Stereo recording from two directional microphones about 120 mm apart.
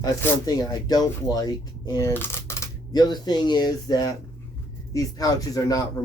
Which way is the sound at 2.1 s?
20° left (ahead or behind).